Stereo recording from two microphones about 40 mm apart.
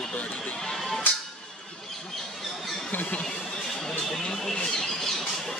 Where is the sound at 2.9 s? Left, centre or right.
Left.